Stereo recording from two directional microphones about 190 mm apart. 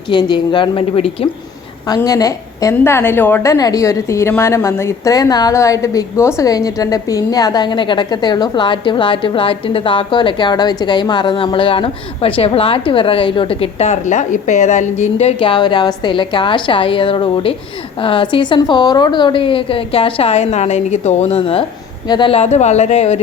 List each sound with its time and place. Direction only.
0.1 s a woman's voice: 25° left (ahead or behind)
1.9 s a woman's voice: 20° left (ahead or behind); by 23.2 s 35° left (ahead or behind)